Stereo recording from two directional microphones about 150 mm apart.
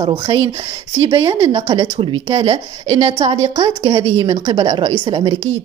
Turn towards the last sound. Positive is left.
turn(degrees=-35)  # may be behind; listen again after turning